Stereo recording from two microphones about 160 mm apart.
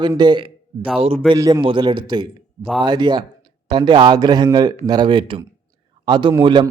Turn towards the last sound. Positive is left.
turn(degrees=-30)  # may be behind; listen again after turning